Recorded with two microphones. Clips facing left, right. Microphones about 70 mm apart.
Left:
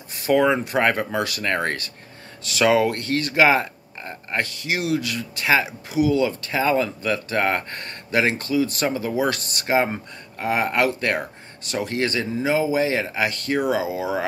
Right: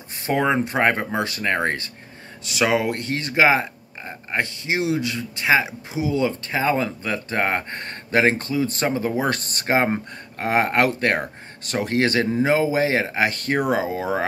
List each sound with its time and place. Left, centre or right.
0.2 s speech: right